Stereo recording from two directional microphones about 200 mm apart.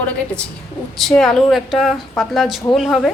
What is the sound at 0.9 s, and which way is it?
A woman's voice, centre (ahead or behind).